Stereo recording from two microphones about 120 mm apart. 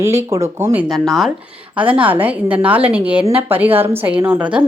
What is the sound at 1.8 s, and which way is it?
A woman's voice, 15° right (ahead or behind).